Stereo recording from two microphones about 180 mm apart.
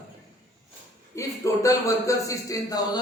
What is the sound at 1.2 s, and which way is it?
Speech, 15° left (ahead or behind).